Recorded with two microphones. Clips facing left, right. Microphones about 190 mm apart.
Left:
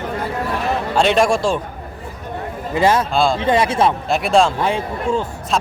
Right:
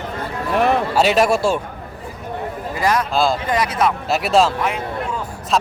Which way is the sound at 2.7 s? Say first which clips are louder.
Left 4 dB; 25° left (ahead or behind).